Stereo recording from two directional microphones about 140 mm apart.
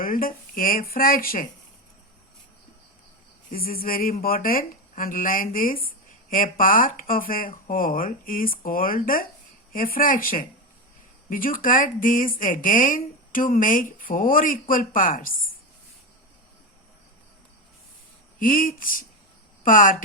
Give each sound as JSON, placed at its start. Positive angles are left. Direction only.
{"t": 0.0, "sound": "speech", "side_deg": 85}
{"t": 3.5, "sound": "speech", "side_deg": 90}
{"t": 18.3, "sound": "speech", "side_deg": 80}